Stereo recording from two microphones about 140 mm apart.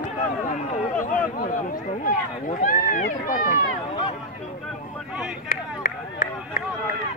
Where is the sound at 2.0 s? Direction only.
70° left (ahead or behind).